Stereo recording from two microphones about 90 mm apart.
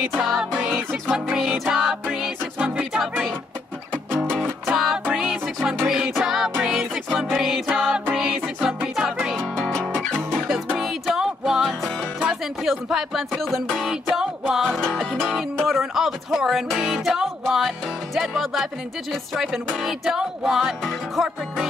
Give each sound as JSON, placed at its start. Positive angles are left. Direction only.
{"t": 0.2, "sound": "music", "side_deg": -5}
{"t": 4.1, "sound": "music", "side_deg": -20}
{"t": 4.6, "sound": "music", "side_deg": -5}
{"t": 9.6, "sound": "music", "side_deg": 10}
{"t": 10.8, "sound": "music", "side_deg": 0}
{"t": 12.2, "sound": "speech", "side_deg": -5}
{"t": 14.5, "sound": "music", "side_deg": 0}